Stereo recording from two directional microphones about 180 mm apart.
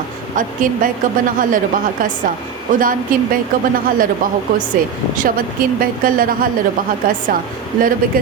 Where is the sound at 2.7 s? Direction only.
45° right (ahead or behind).